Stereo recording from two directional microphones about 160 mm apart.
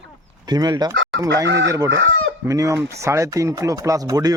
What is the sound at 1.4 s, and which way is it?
Chicken, 90° right.